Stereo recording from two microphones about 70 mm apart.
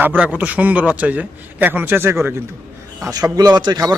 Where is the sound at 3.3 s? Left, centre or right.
Right.